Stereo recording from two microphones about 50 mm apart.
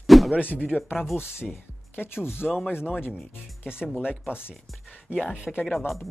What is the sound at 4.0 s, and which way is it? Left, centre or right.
Speech, centre.